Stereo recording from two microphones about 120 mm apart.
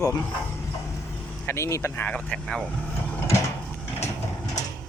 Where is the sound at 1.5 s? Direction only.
25° left (ahead or behind); by 2.6 s 5° left (ahead or behind).